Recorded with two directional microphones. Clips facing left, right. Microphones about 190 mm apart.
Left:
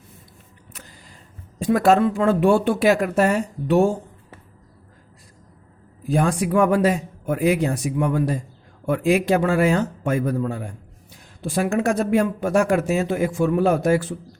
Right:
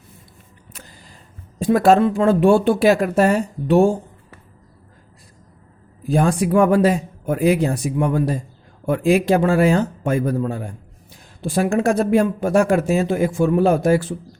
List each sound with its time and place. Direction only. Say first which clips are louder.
1.6 s speech: right 3 dB; 30° right (ahead or behind)
6.1 s speech: right 3 dB; 30° right (ahead or behind)